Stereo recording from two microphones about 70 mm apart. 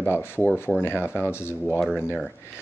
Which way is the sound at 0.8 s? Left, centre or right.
Left.